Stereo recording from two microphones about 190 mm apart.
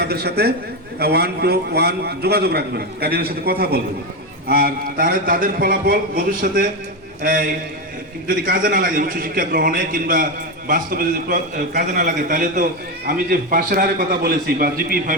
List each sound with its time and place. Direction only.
0.0 s a man's voice: 60° right (ahead or behind)
8.4 s a man's voice: 45° right (ahead or behind)